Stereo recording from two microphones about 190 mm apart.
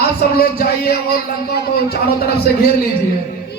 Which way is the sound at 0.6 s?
55° left (ahead or behind).